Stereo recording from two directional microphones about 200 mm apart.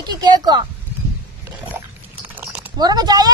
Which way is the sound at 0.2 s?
20° right (ahead or behind).